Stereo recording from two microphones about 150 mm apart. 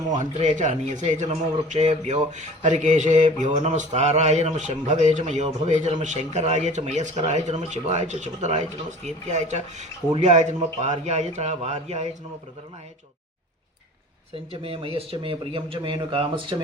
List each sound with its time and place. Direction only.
0.2 s a man's voice: 50° right (ahead or behind)
14.5 s speech: 40° right (ahead or behind)